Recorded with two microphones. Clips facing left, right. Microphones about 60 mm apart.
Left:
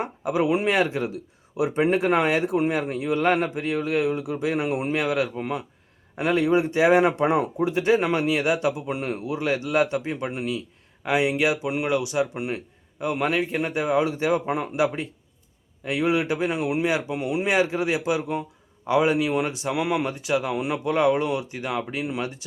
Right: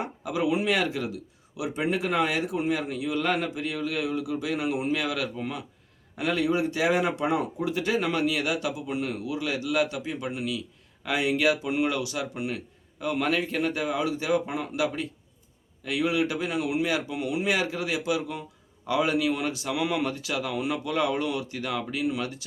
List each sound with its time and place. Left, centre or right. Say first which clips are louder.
0.0 s speech: left 4 dB; left